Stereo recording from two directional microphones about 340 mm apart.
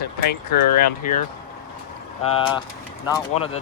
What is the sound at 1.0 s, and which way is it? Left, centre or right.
Speech, left.